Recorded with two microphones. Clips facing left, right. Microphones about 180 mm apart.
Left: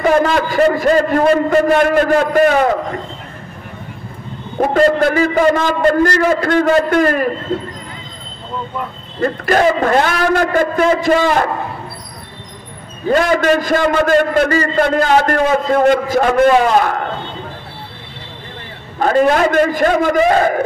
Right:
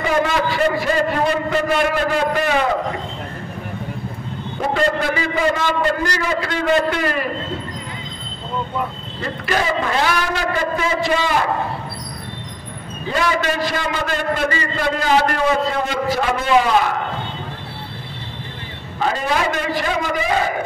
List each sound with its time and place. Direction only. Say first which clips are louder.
0.2 s a man's voice: left 5 dB; 45° left (ahead or behind)
4.6 s a man's voice: left 7 dB; 45° left (ahead or behind)
9.2 s a man's voice: left 8 dB; 50° left (ahead or behind)
13.1 s a man's voice: left 7 dB; 50° left (ahead or behind)
18.9 s a man's voice: left 8 dB; 50° left (ahead or behind)